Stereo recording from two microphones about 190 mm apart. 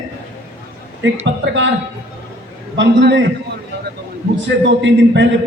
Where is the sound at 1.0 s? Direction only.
75° right (ahead or behind).